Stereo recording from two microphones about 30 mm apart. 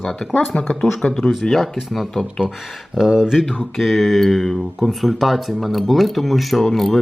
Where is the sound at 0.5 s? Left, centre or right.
Left.